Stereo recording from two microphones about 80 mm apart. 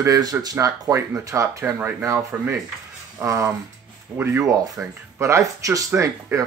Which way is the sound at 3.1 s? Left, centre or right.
Right.